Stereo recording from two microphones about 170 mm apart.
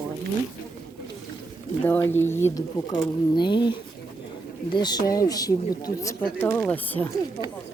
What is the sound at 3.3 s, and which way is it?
Speech, 25° left (ahead or behind).